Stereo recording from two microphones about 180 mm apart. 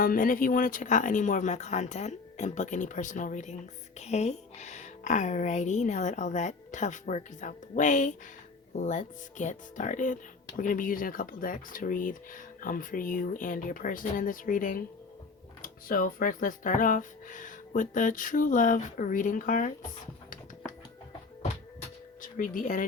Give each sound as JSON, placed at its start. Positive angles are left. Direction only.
{"t": 0.0, "sound": "a woman's voice", "side_deg": 50}
{"t": 22.2, "sound": "speech", "side_deg": 50}